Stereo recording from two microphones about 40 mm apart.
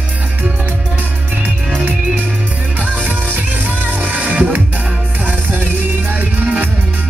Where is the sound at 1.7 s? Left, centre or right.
Right.